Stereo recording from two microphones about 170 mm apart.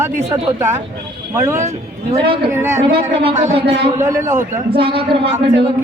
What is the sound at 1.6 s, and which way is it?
Speech, 40° right (ahead or behind).